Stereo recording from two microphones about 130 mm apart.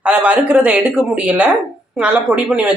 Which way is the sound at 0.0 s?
10° right (ahead or behind).